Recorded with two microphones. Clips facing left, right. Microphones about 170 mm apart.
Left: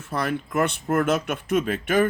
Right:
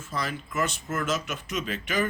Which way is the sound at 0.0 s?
60° left (ahead or behind).